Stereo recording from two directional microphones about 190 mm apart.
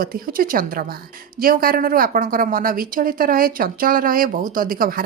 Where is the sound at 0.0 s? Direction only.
50° right (ahead or behind).